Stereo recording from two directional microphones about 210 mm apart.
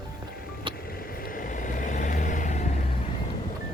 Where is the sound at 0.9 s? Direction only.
45° left (ahead or behind).